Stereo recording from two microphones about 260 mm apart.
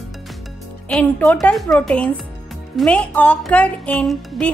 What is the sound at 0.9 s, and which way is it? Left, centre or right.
Speech, centre.